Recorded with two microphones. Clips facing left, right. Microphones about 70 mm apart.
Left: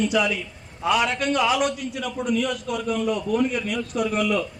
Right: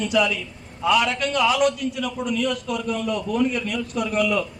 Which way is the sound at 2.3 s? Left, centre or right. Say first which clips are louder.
Right 1 dB; centre.